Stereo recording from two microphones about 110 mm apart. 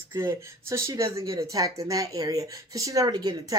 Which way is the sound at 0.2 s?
25° right (ahead or behind).